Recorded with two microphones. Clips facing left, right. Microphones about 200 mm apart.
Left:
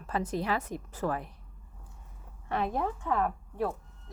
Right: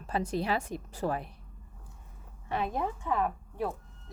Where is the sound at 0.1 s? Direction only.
30° right (ahead or behind).